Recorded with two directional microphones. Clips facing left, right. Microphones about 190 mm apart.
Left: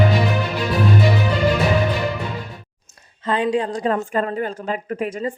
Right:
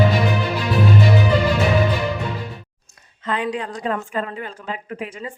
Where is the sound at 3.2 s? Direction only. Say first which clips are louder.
Left 4 dB; 30° left (ahead or behind).